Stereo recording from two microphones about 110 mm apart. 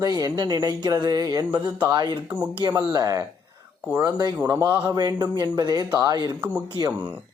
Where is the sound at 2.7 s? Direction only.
35° right (ahead or behind).